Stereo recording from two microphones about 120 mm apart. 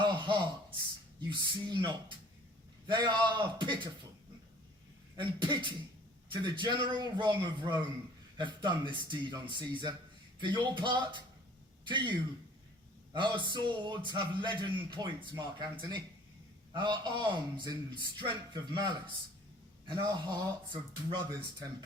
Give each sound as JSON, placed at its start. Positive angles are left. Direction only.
{"t": 0.0, "sound": "a sound", "side_deg": -40}
{"t": 1.3, "sound": "speech", "side_deg": -40}
{"t": 5.1, "sound": "speech", "side_deg": -40}
{"t": 16.7, "sound": "speech", "side_deg": -40}